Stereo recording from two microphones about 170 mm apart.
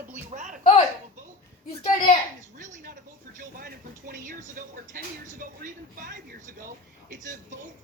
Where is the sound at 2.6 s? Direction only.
50° right (ahead or behind).